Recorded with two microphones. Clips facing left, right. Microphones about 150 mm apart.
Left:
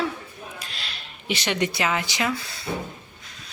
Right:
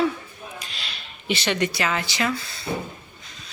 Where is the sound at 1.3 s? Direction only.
15° left (ahead or behind).